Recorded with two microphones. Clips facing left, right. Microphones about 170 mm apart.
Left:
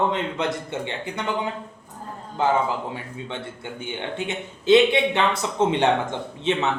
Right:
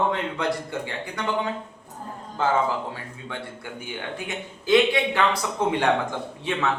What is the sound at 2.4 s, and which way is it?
A man's voice, 20° left (ahead or behind).